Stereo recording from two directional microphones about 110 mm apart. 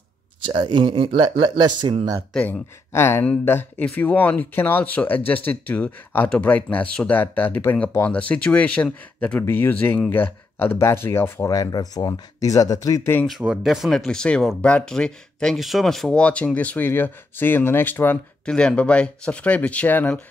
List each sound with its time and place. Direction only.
0.5 s speech: 45° right (ahead or behind)
2.3 s speech: 10° left (ahead or behind)
2.9 s speech: 25° left (ahead or behind)
11.4 s speech: 35° left (ahead or behind)
13.4 s speech: 5° right (ahead or behind); by 18.2 s 20° left (ahead or behind)
18.4 s speech: 10° left (ahead or behind)